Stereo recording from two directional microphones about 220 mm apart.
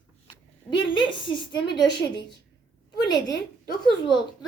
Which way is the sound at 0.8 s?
20° left (ahead or behind).